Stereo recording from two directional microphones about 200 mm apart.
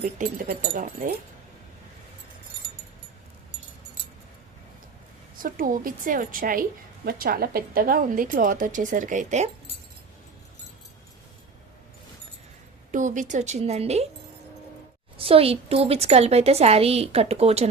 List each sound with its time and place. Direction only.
0.0 s a woman's voice: 40° right (ahead or behind)
5.4 s a woman's voice: 45° right (ahead or behind)
12.9 s a woman's voice: 40° right (ahead or behind)
15.2 s a woman's voice: 30° right (ahead or behind)